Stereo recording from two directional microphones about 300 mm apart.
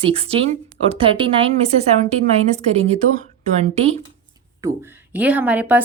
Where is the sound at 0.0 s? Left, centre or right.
Centre.